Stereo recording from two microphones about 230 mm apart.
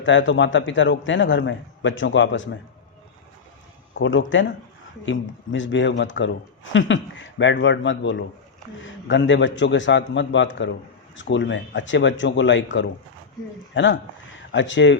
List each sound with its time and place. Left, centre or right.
0.0 s a man's voice: left
3.9 s a man's voice: left